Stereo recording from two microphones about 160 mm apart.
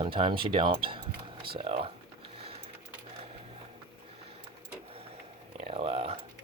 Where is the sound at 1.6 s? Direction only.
35° right (ahead or behind).